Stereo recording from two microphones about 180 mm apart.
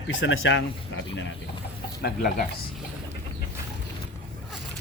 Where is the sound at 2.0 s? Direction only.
60° left (ahead or behind).